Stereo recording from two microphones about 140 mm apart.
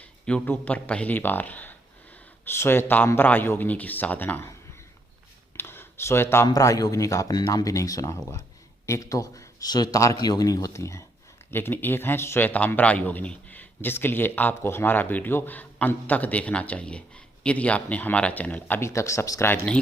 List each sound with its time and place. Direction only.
0.0 s speech: 10° left (ahead or behind)
5.5 s a man's voice: 15° left (ahead or behind)